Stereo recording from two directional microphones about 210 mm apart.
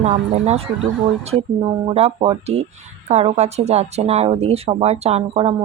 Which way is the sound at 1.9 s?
30° right (ahead or behind).